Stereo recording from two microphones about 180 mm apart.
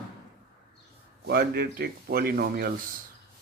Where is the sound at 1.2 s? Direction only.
60° right (ahead or behind).